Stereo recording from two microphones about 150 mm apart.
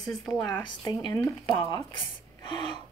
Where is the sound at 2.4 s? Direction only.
30° left (ahead or behind).